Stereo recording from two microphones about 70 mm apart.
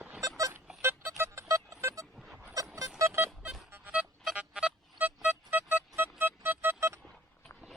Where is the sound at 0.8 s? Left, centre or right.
Right.